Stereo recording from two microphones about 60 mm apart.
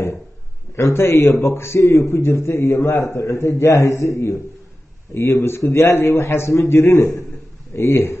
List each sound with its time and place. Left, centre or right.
0.7 s a man's voice: left